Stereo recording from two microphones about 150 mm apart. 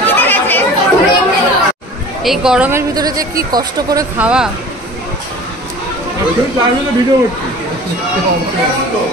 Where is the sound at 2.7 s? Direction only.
25° right (ahead or behind).